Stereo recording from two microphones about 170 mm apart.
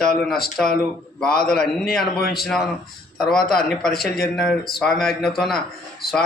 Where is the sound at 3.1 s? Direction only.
5° left (ahead or behind).